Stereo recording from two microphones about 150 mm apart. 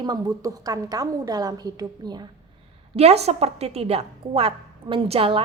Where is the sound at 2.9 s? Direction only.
45° right (ahead or behind).